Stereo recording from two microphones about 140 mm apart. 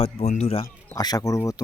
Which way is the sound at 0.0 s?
50° left (ahead or behind).